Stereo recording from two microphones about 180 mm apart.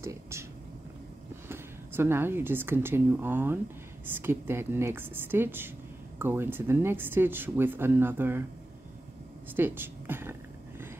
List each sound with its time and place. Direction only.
0.0 s a sound: 15° right (ahead or behind)
1.5 s speech: 15° right (ahead or behind)
9.6 s speech: 10° right (ahead or behind)